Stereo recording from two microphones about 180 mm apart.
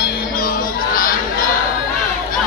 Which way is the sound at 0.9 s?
50° left (ahead or behind).